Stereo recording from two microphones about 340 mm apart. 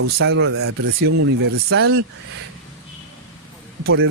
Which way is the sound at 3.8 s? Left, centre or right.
Right.